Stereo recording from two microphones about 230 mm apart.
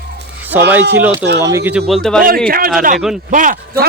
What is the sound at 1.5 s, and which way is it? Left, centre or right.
Speech, centre.